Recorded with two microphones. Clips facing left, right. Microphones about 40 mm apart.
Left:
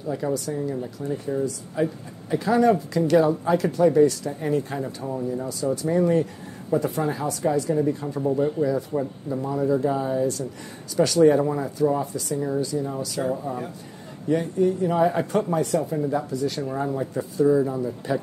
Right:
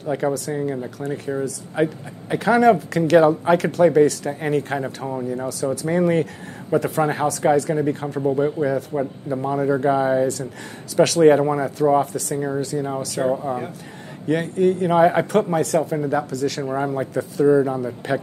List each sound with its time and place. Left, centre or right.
0.0 s speech: right
1.0 s speech: right
1.8 s speech: right
5.3 s speech: right
8.3 s speech: right
8.9 s a man's voice: centre
9.3 s speech: right
12.4 s speech: right
14.2 s speech: right
16.1 s speech: right
16.7 s speech: right
17.1 s speech: right
17.5 s speech: right